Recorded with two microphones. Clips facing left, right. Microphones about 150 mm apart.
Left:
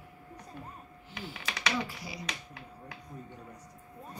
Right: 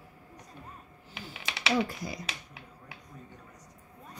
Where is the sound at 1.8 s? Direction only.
45° right (ahead or behind).